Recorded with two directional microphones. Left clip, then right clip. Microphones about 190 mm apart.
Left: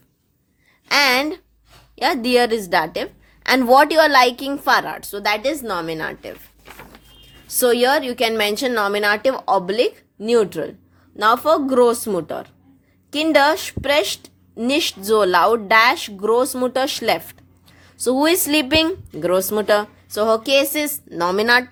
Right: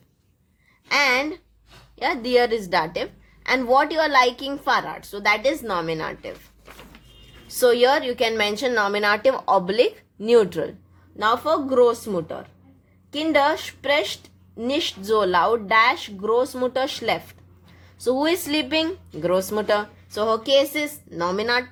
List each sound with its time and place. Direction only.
0.9 s a sound: 35° left (ahead or behind)
2.0 s a woman's voice: 35° left (ahead or behind); by 10.8 s 15° left (ahead or behind)
11.2 s a woman's voice: 35° left (ahead or behind)